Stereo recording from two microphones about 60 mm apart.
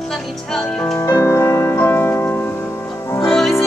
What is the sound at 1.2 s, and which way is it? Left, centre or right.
Music, left.